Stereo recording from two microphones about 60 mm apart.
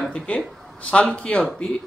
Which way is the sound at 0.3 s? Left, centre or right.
Left.